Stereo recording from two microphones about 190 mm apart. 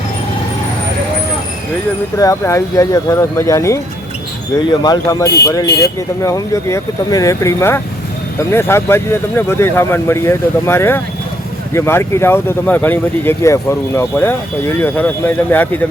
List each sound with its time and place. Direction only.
2.1 s speech: 15° left (ahead or behind)
4.8 s speech: 20° left (ahead or behind)